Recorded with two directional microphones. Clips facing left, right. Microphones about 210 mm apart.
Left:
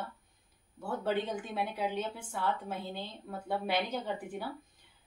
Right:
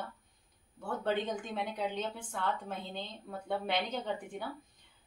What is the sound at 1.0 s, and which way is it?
A woman's voice, 10° left (ahead or behind).